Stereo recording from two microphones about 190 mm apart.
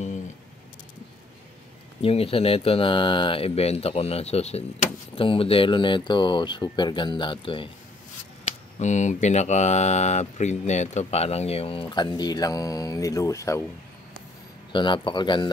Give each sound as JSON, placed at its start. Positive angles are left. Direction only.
{"t": 2.0, "sound": "speech", "side_deg": 30}
{"t": 8.5, "sound": "speech", "side_deg": 35}
{"t": 14.7, "sound": "speech", "side_deg": 25}